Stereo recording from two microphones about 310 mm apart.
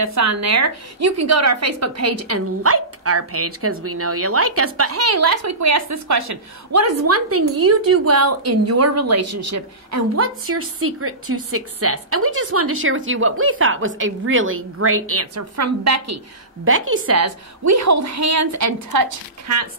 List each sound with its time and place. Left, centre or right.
0.0 s a woman's voice: right
16.6 s a woman's voice: right